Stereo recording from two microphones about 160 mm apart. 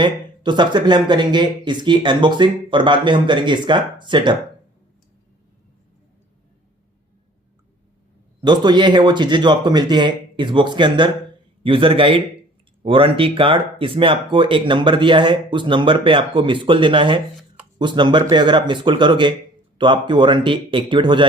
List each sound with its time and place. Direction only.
0.0 s speech: 30° right (ahead or behind)
8.4 s speech: 30° right (ahead or behind)